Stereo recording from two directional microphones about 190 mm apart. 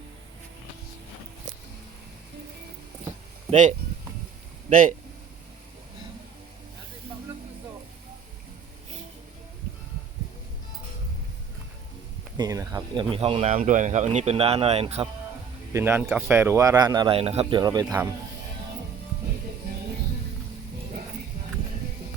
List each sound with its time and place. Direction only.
3.5 s speech: 40° right (ahead or behind)
12.4 s speech: 20° right (ahead or behind)
15.7 s speech: 10° right (ahead or behind)
17.8 s speech: 10° right (ahead or behind)